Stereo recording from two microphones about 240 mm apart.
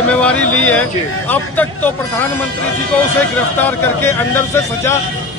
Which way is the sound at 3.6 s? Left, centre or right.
Centre.